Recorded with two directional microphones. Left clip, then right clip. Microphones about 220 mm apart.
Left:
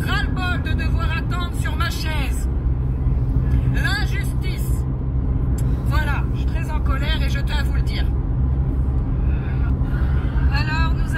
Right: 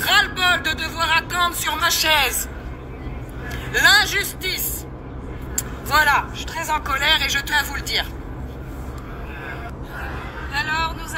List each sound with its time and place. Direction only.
0.0 s vehicle: 50° right (ahead or behind)
3.7 s music: 50° right (ahead or behind)
5.9 s vehicle: 50° right (ahead or behind)